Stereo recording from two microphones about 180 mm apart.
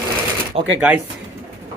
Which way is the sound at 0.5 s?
35° right (ahead or behind).